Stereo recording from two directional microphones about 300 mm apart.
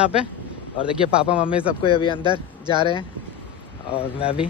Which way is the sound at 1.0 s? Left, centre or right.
Centre.